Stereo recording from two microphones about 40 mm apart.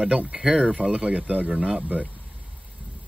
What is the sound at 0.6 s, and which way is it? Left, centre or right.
Speech, right.